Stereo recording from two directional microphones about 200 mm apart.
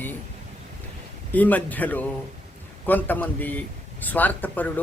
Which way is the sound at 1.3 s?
10° left (ahead or behind).